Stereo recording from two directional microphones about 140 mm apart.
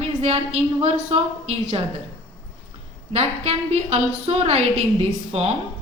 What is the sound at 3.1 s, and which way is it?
Speech, 50° right (ahead or behind).